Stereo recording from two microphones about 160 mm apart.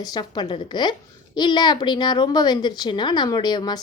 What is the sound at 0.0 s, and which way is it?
A woman's voice, 25° left (ahead or behind).